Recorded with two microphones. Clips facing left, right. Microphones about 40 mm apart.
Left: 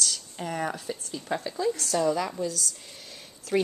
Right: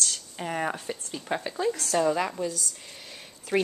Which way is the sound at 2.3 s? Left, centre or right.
Centre.